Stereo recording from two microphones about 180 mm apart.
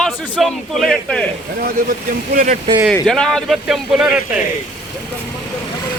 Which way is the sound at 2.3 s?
45° right (ahead or behind).